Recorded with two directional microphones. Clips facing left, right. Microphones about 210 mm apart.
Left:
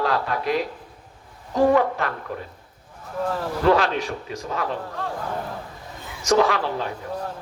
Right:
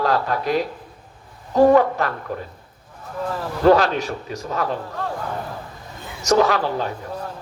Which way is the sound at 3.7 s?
40° right (ahead or behind).